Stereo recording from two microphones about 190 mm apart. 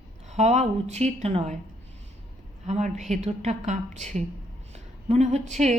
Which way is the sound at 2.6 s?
35° right (ahead or behind).